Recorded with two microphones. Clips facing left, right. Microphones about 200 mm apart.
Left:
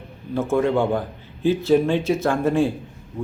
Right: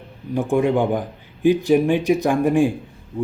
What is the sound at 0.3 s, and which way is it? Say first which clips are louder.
A man's voice: right 1 dB; 15° right (ahead or behind).